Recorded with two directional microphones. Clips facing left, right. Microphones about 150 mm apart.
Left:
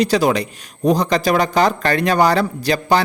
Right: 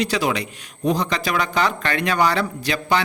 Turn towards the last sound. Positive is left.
turn(degrees=40)  # may be behind; listen again after turning